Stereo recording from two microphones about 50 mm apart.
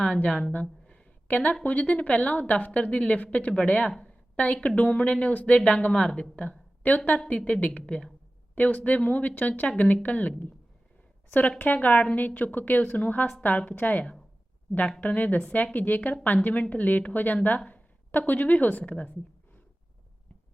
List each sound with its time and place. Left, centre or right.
0.3 s a woman's voice: centre
0.5 s a sound: left
1.3 s a woman's voice: left
6.0 s speech: centre
6.3 s a woman's voice: left
11.4 s a woman's voice: left
15.0 s a woman's voice: left